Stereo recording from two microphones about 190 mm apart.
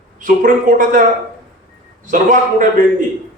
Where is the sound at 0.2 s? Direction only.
40° right (ahead or behind).